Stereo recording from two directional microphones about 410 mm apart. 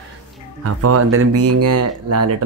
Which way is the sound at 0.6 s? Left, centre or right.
Right.